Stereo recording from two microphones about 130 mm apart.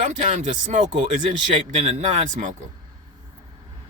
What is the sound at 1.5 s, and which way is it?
Speech, 55° right (ahead or behind).